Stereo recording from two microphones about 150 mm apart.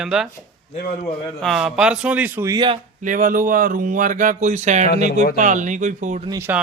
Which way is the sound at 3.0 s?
60° right (ahead or behind).